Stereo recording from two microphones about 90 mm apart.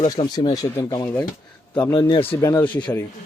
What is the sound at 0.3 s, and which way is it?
Speech, 45° left (ahead or behind).